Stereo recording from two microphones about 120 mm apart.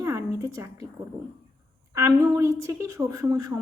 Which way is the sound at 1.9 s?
25° right (ahead or behind).